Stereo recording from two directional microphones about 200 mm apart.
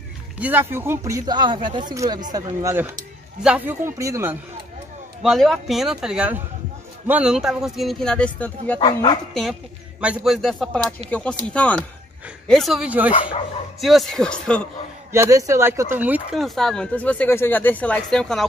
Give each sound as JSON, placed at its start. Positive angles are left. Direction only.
{"t": 0.4, "sound": "a man's voice", "side_deg": -10}
{"t": 5.2, "sound": "speech", "side_deg": 0}
{"t": 8.7, "sound": "speech", "side_deg": 25}
{"t": 9.3, "sound": "speech", "side_deg": 0}
{"t": 15.1, "sound": "speech", "side_deg": -15}